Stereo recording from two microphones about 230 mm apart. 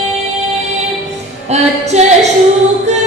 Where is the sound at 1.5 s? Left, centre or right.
Right.